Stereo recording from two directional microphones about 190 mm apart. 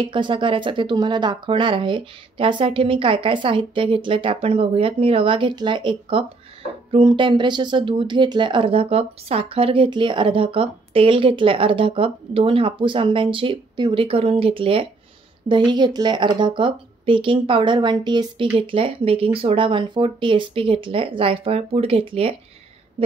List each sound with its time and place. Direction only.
0.0 s speech: 25° right (ahead or behind)